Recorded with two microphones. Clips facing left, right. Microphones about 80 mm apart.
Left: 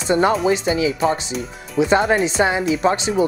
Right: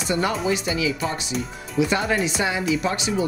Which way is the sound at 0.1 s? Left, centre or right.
Left.